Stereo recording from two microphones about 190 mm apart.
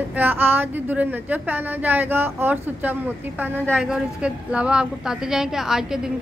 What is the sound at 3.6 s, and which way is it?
A woman's voice, centre (ahead or behind).